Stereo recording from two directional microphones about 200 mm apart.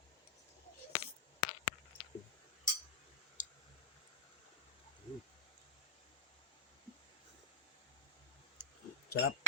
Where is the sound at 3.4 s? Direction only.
40° left (ahead or behind).